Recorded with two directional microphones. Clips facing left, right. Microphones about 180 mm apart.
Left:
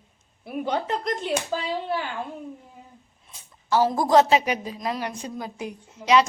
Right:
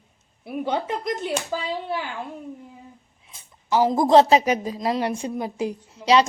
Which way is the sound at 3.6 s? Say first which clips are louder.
Right 2 dB; 15° right (ahead or behind).